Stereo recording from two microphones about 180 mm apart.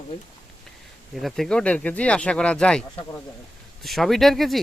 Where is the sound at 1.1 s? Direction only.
Centre (ahead or behind).